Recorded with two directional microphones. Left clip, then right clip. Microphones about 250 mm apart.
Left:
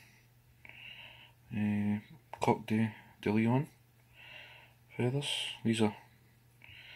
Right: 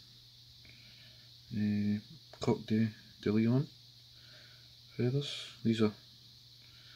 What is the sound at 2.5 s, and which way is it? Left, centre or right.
Speech, centre.